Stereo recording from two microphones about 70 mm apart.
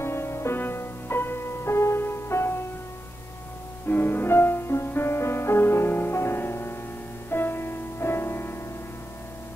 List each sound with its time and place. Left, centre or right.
0.0 s music: left
3.8 s music: left